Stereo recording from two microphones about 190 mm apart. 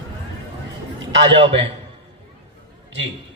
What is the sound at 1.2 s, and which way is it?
Speech, 70° right (ahead or behind).